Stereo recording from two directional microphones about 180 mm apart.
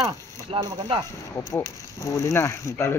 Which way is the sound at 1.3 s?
15° left (ahead or behind).